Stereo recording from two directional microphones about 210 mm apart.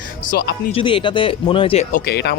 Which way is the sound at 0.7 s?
25° left (ahead or behind).